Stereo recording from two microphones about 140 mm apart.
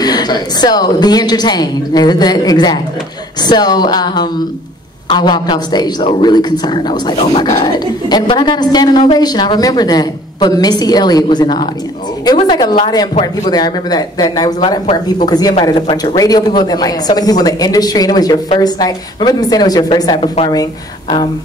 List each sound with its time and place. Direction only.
0.0 s a woman's voice: 30° left (ahead or behind)
7.2 s speech: 50° left (ahead or behind)
7.6 s a woman's voice: 30° left (ahead or behind)